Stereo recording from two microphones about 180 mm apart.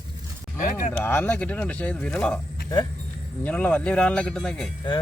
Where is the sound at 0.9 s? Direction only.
10° left (ahead or behind).